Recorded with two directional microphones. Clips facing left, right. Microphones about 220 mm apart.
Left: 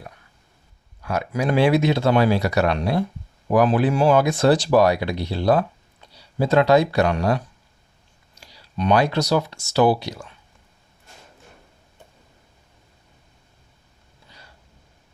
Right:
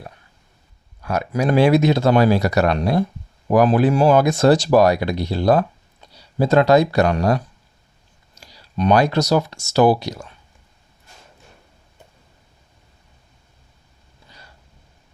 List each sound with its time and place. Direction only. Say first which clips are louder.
1.0 s speech: right 3 dB; 40° right (ahead or behind)